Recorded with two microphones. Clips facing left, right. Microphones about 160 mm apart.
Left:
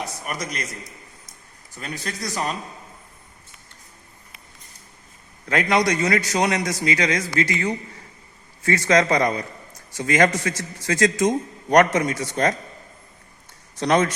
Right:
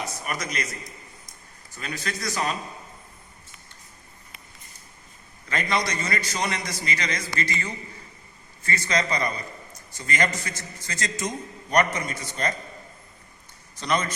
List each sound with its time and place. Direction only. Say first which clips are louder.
1.8 s a man's voice: left 1 dB; 30° left (ahead or behind)
5.5 s a man's voice: left 7 dB; 70° left (ahead or behind)
8.6 s a man's voice: left 8 dB; 90° left
13.7 s speech: left 7 dB; 80° left